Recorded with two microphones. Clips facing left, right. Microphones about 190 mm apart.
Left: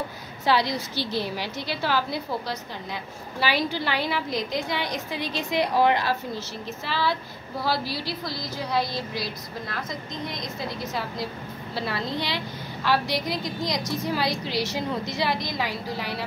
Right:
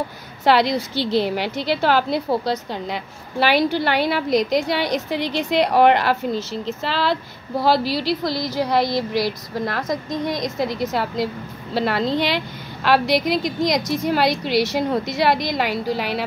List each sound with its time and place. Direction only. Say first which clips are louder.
0.5 s a woman's voice: right 6 dB; 75° right (ahead or behind)
6.6 s a woman's voice: right 5 dB; 90° right
11.7 s a woman's voice: right 9 dB; 80° right